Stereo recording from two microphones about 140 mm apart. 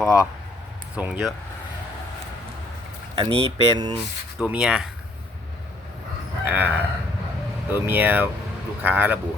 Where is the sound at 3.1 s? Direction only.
30° right (ahead or behind).